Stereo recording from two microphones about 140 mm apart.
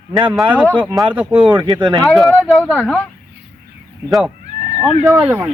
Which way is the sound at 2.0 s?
Centre (ahead or behind).